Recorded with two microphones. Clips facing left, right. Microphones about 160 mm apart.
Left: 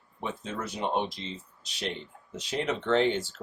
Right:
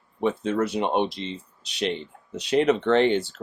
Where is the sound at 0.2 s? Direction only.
65° right (ahead or behind).